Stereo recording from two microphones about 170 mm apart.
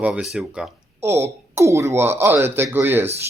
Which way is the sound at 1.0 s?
15° right (ahead or behind).